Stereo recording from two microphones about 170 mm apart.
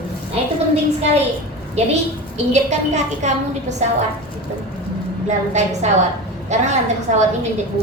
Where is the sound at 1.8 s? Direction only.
40° right (ahead or behind).